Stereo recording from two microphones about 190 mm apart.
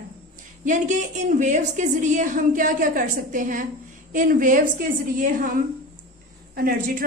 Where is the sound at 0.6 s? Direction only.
40° right (ahead or behind).